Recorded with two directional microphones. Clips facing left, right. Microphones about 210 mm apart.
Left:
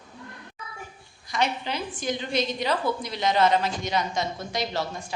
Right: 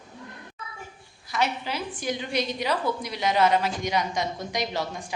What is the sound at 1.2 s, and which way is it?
A woman's voice, 5° right (ahead or behind).